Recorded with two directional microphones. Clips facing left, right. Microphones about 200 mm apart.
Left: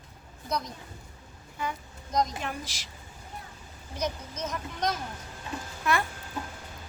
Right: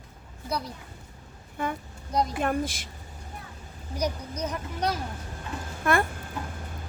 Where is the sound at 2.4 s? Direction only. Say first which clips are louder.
Right 9 dB; 55° right (ahead or behind).